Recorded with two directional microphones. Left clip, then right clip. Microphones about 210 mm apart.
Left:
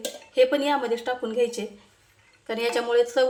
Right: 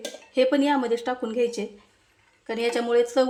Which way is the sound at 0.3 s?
30° right (ahead or behind).